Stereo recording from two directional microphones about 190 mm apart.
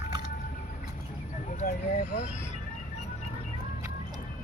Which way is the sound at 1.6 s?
55° left (ahead or behind).